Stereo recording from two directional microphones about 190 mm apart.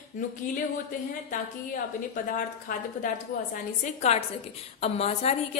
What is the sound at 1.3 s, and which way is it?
Speech, 45° left (ahead or behind).